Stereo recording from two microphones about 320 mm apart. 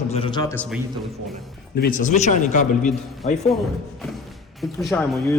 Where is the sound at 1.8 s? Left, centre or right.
Left.